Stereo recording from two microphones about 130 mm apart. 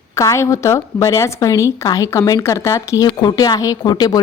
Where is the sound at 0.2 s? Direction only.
25° left (ahead or behind).